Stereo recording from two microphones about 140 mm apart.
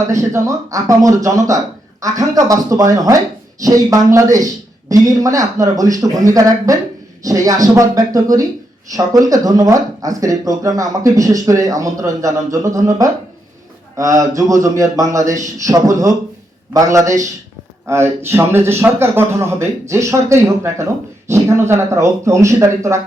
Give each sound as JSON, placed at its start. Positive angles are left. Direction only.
{"t": 0.1, "sound": "speech", "side_deg": -20}